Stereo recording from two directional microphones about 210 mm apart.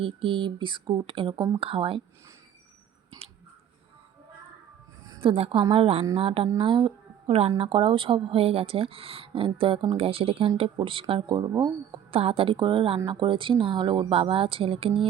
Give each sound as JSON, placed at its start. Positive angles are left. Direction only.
{"t": 0.0, "sound": "speech", "side_deg": -25}
{"t": 5.1, "sound": "speech", "side_deg": -25}